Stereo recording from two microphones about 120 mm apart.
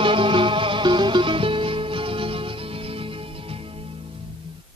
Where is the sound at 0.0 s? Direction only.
45° right (ahead or behind).